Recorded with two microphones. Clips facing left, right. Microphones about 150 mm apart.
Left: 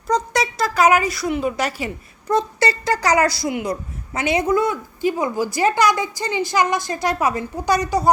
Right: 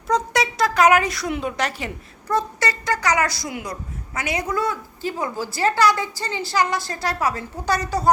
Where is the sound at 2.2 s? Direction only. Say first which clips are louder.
Left 4 dB; 25° left (ahead or behind).